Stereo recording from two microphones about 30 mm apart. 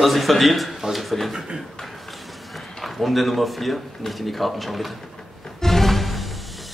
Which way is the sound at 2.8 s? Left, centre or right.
Centre.